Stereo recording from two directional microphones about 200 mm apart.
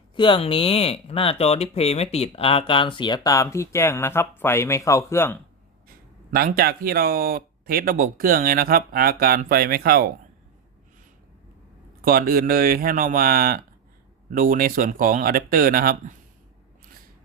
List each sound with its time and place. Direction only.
0.2 s speech: 25° left (ahead or behind)
6.6 s speech: 50° right (ahead or behind)
12.0 s speech: 45° right (ahead or behind)